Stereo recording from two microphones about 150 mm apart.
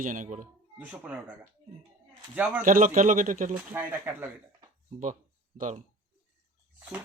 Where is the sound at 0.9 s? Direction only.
10° right (ahead or behind).